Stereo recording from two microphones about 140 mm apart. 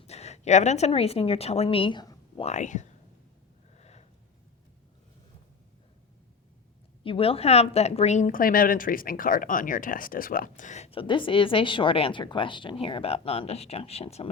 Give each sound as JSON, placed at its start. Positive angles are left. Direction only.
{"t": 0.1, "sound": "a woman's voice", "side_deg": 50}
{"t": 2.4, "sound": "speech", "side_deg": 55}
{"t": 3.8, "sound": "a sound", "side_deg": 50}
{"t": 7.0, "sound": "a woman's voice", "side_deg": 40}
{"t": 10.9, "sound": "a woman's voice", "side_deg": 35}